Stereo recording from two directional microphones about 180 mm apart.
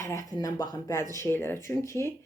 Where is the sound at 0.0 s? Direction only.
15° left (ahead or behind).